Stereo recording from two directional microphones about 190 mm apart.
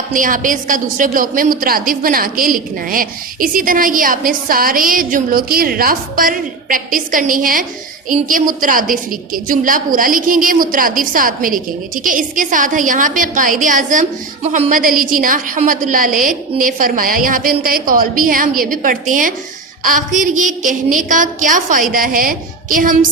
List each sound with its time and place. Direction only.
0.1 s a woman's voice: 45° right (ahead or behind)